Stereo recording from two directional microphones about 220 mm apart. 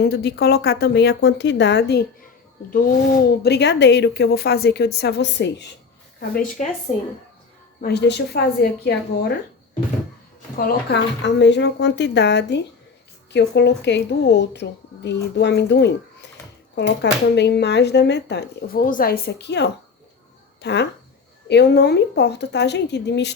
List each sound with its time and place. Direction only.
0.0 s speech: 45° left (ahead or behind)
3.4 s speech: 50° left (ahead or behind)
6.9 s a woman's voice: 20° left (ahead or behind)
7.8 s speech: 50° left (ahead or behind)
10.6 s speech: 45° left (ahead or behind)